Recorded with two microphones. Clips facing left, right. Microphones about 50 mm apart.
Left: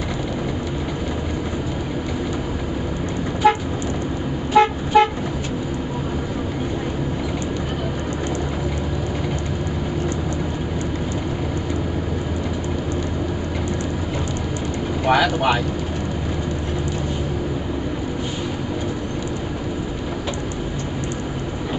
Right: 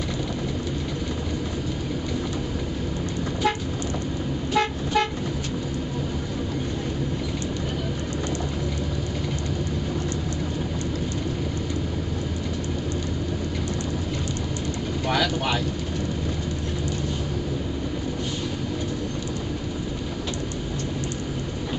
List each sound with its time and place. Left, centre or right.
3.4 s vehicle: centre
15.0 s vehicle: left